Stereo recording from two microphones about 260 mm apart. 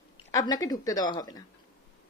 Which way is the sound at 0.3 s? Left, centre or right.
Centre.